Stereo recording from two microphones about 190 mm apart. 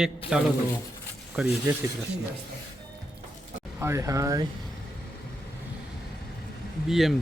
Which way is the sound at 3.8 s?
15° right (ahead or behind).